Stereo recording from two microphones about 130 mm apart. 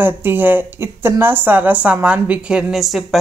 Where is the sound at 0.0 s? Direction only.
15° right (ahead or behind).